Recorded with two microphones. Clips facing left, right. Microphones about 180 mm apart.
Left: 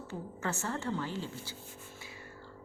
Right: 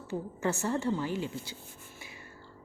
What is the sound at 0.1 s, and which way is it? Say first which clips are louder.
A woman's voice: right 6 dB; 10° right (ahead or behind).